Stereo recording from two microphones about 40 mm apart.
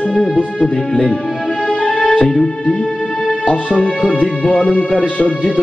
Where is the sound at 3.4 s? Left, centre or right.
Left.